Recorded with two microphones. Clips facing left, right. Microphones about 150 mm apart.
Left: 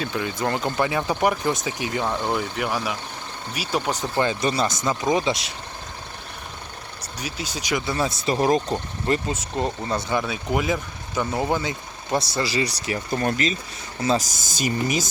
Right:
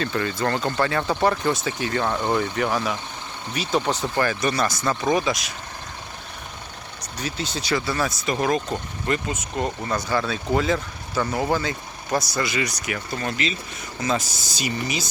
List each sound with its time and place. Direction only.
0.0 s speech: 10° left (ahead or behind)
4.2 s speech: 25° left (ahead or behind)
7.0 s speech: 10° left (ahead or behind); by 9.6 s 30° left (ahead or behind)
9.9 s speech: 15° left (ahead or behind); by 15.1 s 45° left (ahead or behind)